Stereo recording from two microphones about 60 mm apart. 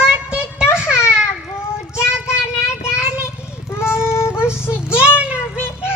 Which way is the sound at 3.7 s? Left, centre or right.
Left.